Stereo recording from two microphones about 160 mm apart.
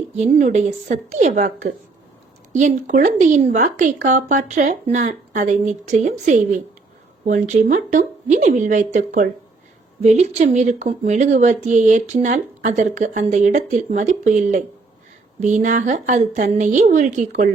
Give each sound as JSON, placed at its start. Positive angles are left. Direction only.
{"t": 0.2, "sound": "speech", "side_deg": -50}